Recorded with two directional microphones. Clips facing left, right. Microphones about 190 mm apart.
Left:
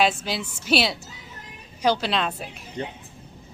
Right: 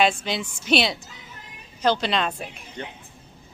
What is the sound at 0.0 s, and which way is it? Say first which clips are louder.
A woman's voice: right 1 dB; 5° left (ahead or behind).